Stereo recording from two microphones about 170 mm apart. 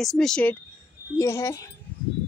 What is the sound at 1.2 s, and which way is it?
Speech, 15° left (ahead or behind).